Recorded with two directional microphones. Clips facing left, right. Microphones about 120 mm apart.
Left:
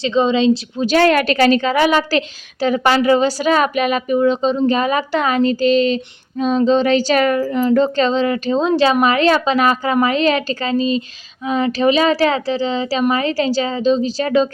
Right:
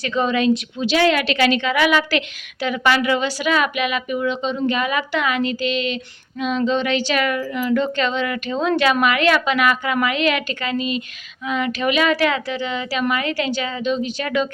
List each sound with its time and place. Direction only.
0.0 s a woman's voice: 20° left (ahead or behind)
0.8 s a woman's voice: 45° left (ahead or behind)